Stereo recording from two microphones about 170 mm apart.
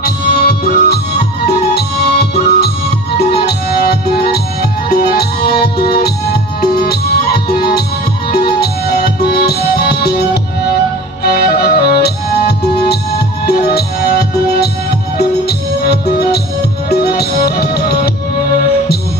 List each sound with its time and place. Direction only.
0.0 s music: 60° left (ahead or behind)